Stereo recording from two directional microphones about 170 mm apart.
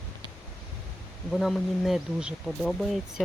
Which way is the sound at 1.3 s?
Centre (ahead or behind).